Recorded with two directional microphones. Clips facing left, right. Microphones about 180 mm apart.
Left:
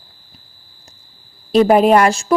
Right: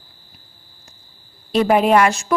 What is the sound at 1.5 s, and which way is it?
Speech, 40° left (ahead or behind).